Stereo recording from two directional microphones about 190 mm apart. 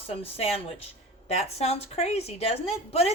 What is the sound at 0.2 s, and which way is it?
A woman's voice, 30° left (ahead or behind).